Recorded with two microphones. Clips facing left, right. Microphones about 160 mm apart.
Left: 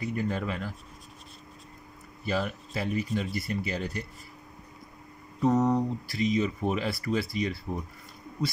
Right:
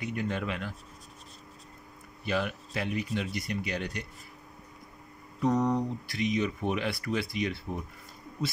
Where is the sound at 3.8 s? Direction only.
70° right (ahead or behind).